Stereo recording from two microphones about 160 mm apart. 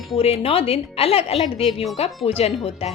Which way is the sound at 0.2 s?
35° left (ahead or behind).